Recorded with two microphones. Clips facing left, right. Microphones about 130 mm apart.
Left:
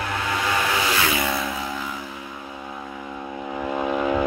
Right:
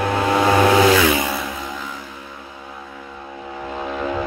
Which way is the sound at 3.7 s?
10° left (ahead or behind).